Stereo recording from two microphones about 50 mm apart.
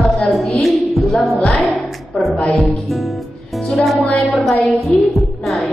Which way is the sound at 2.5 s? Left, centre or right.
Centre.